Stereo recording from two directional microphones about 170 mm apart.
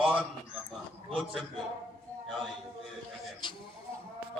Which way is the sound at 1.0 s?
30° right (ahead or behind).